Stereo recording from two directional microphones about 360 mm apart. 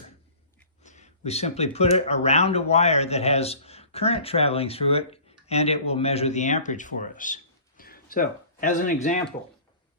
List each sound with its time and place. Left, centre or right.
0.8 s speech: centre